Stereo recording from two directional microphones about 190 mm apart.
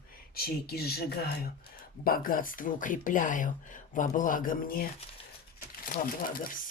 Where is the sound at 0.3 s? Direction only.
55° left (ahead or behind).